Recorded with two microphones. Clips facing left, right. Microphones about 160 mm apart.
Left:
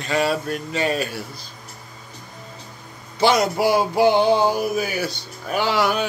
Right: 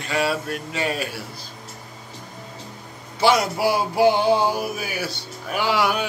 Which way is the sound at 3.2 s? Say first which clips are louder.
Left 1 dB; 5° right (ahead or behind).